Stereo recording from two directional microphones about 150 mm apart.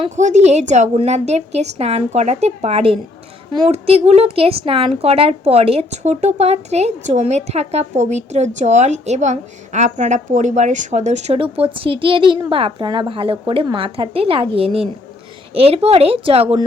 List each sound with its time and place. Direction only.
0.2 s a woman's voice: 50° right (ahead or behind)